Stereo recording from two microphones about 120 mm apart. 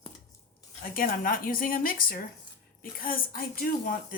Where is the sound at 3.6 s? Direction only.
90° left.